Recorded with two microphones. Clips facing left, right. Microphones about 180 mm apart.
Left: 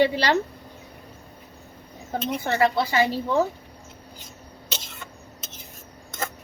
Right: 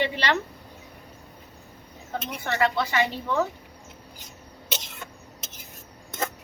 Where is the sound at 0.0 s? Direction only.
35° left (ahead or behind).